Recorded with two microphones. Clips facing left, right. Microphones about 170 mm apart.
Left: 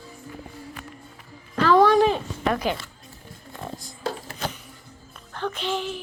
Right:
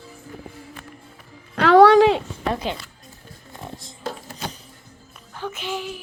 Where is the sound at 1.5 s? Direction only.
70° right (ahead or behind); by 2.2 s 90° right.